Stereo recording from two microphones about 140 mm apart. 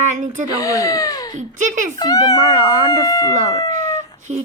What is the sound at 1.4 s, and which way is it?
Speech, 60° right (ahead or behind).